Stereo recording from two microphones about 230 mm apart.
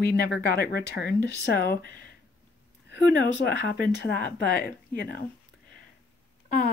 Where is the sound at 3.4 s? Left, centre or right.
Left.